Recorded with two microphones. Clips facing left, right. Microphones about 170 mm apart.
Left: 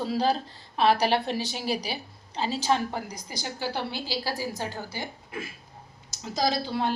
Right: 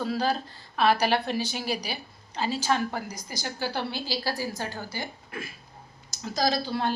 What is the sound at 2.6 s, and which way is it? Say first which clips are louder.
Speech: left 2 dB; 20° left (ahead or behind).